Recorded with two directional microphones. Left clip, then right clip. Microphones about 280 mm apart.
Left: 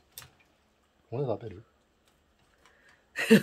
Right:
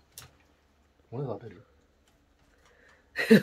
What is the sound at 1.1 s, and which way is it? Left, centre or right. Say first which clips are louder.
Speech: left 4 dB; left.